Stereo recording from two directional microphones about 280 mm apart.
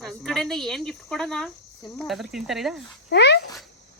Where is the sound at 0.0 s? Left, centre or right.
Centre.